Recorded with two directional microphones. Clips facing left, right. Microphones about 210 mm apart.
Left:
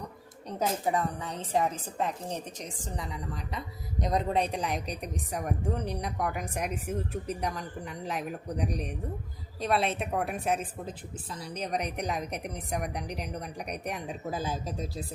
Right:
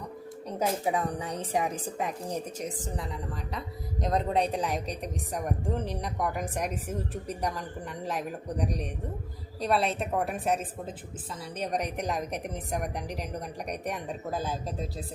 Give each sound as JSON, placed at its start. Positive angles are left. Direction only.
{"t": 0.9, "sound": "a woman's voice", "side_deg": -15}